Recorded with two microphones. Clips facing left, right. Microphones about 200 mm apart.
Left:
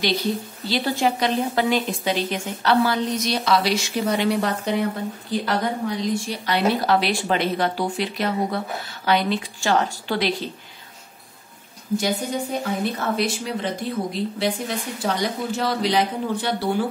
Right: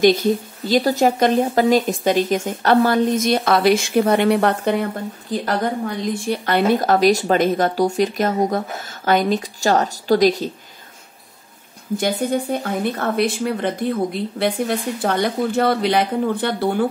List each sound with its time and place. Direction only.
0.0 s a woman's voice: 45° right (ahead or behind)
12.0 s a woman's voice: 55° right (ahead or behind)